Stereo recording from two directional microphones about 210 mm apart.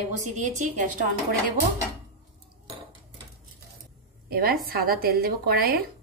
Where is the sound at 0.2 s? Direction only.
35° right (ahead or behind).